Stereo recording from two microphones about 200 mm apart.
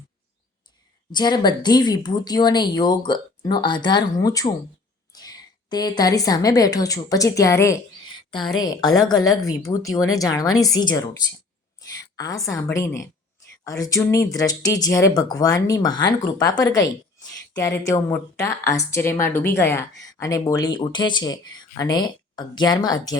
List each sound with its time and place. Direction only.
1.1 s a woman's voice: 20° left (ahead or behind)